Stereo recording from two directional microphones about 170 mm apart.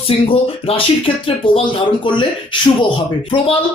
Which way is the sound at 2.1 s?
30° left (ahead or behind).